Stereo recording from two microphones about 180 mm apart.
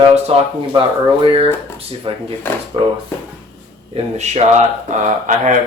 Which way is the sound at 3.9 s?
35° right (ahead or behind).